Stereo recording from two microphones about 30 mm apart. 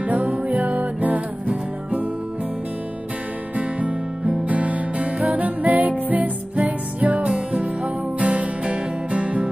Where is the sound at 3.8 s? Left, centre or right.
Right.